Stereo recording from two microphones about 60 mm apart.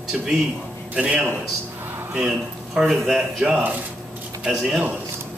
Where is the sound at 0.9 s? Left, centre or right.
Centre.